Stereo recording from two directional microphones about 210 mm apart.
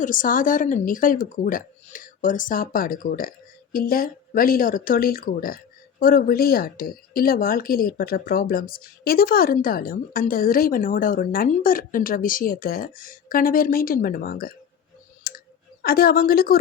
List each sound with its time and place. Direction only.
0.0 s a woman's voice: 40° left (ahead or behind)
15.3 s clicking: 45° left (ahead or behind)
15.8 s a woman's voice: 45° left (ahead or behind)